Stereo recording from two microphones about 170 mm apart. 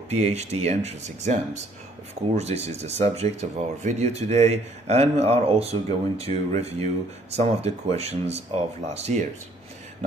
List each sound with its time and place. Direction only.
0.1 s speech: 40° right (ahead or behind)